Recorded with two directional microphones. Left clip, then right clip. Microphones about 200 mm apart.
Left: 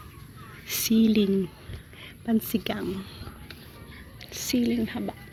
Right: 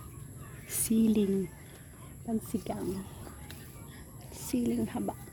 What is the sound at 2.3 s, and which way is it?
Speech, centre (ahead or behind).